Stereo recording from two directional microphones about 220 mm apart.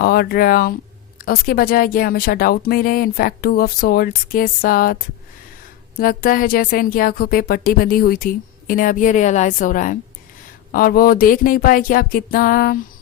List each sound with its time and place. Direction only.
0.0 s speech: 45° left (ahead or behind)
6.0 s speech: 40° left (ahead or behind)